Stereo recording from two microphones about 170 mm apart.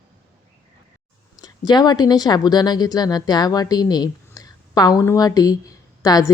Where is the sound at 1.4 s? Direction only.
25° left (ahead or behind).